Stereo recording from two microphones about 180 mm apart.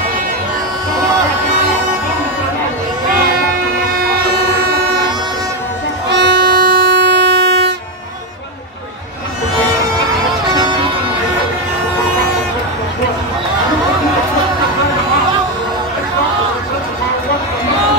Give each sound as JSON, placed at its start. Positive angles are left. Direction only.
{"t": 4.3, "sound": "train", "side_deg": -60}
{"t": 6.0, "sound": "music", "side_deg": -70}